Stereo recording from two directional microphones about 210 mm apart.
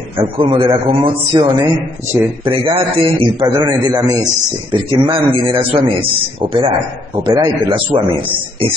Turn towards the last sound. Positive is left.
turn(degrees=-25)  # may be behind; listen again after turning